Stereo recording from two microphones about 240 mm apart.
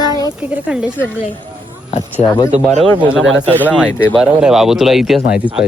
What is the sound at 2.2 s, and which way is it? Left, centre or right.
Speech, left.